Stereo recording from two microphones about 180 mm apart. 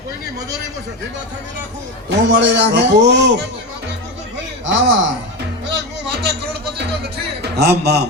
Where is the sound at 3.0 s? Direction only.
70° right (ahead or behind).